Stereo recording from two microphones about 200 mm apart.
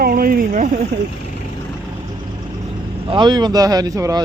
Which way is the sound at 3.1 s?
25° right (ahead or behind).